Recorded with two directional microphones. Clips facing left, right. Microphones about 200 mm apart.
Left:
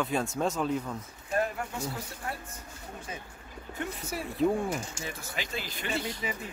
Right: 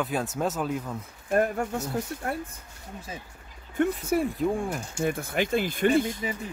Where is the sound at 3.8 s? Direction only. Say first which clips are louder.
Right 12 dB; 55° right (ahead or behind).